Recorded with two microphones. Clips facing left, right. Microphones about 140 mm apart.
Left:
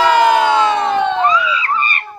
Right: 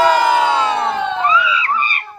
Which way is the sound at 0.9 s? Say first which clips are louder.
Left 5 dB; 65° left (ahead or behind).